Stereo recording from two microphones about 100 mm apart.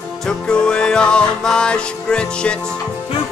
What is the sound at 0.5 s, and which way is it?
Music, 10° left (ahead or behind).